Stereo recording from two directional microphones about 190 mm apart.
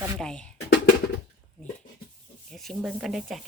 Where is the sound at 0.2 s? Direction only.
5° left (ahead or behind).